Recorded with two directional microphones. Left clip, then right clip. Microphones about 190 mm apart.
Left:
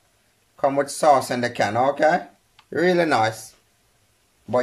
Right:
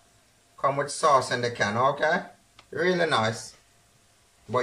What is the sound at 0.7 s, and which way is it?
Speech, 50° left (ahead or behind).